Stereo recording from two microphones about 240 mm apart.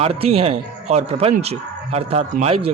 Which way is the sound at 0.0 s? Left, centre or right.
Right.